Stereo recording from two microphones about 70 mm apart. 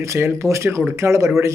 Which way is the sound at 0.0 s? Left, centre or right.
Right.